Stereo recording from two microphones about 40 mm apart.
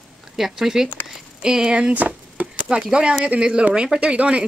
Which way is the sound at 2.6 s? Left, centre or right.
Centre.